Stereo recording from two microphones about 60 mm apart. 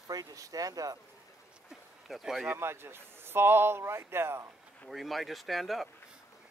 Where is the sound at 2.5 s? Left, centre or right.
Right.